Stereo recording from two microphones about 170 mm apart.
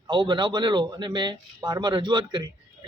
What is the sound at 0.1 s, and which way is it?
A man's voice, 25° right (ahead or behind).